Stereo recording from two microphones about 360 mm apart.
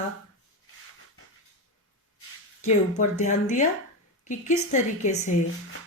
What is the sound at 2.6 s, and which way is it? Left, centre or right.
A woman's voice, centre.